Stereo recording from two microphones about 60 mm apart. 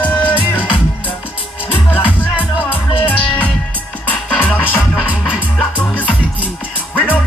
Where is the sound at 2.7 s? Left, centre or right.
Left.